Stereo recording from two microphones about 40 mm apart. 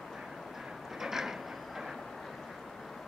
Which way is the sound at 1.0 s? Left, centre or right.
Centre.